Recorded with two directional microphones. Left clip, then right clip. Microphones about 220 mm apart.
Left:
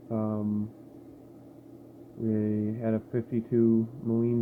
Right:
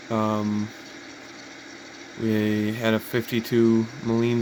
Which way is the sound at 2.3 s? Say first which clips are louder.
Right 6 dB; 35° right (ahead or behind).